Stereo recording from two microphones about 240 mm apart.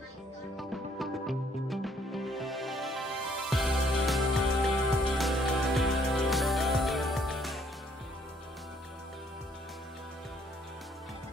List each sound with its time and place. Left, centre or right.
0.6 s music: centre